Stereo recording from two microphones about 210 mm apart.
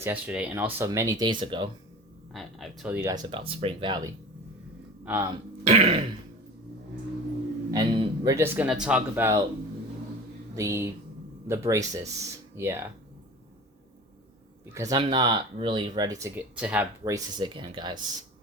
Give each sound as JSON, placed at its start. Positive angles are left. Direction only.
{"t": 0.0, "sound": "speech", "side_deg": -5}
{"t": 2.3, "sound": "speech", "side_deg": 0}
{"t": 3.2, "sound": "speech", "side_deg": -25}
{"t": 5.6, "sound": "speech", "side_deg": -30}
{"t": 7.7, "sound": "speech", "side_deg": -20}
{"t": 10.5, "sound": "speech", "side_deg": -15}
{"t": 14.7, "sound": "speech", "side_deg": -15}
{"t": 17.0, "sound": "speech", "side_deg": -20}